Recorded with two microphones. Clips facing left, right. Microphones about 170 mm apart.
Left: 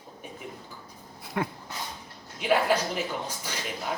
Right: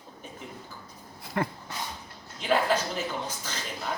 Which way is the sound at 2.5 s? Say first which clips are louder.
Left 1 dB; 10° left (ahead or behind).